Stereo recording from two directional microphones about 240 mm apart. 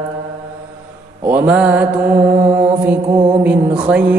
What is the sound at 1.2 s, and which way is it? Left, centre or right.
Mantra, centre.